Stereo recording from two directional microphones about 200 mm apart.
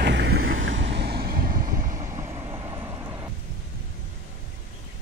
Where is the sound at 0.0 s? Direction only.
60° right (ahead or behind).